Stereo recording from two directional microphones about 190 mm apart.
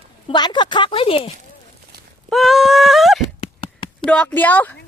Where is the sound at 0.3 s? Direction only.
20° left (ahead or behind).